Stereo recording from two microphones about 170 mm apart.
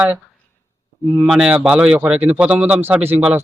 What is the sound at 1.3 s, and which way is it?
Speech, 5° right (ahead or behind).